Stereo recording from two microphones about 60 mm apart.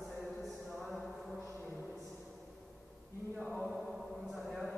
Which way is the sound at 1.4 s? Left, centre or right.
Left.